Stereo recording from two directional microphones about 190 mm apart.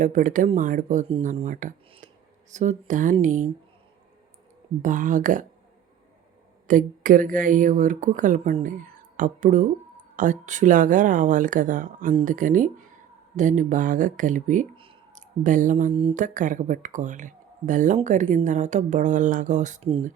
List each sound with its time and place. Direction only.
0.0 s speech: 40° right (ahead or behind)
4.8 s speech: 45° right (ahead or behind)
6.7 s speech: 45° right (ahead or behind)
15.9 s speech: 30° right (ahead or behind)
16.1 s speech: 40° right (ahead or behind)